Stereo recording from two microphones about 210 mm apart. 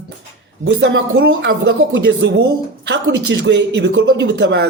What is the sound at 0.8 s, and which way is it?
Speech, 55° right (ahead or behind).